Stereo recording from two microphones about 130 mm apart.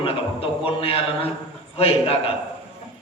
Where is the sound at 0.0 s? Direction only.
45° left (ahead or behind).